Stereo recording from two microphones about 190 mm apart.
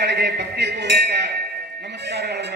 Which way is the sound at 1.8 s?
60° right (ahead or behind).